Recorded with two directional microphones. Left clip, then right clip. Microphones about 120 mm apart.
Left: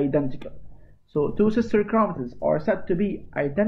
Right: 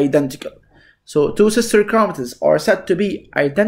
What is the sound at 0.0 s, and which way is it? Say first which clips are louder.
Speech: right 8 dB; 35° right (ahead or behind).